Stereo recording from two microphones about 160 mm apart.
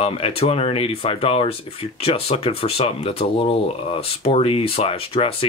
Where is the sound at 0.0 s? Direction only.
35° left (ahead or behind).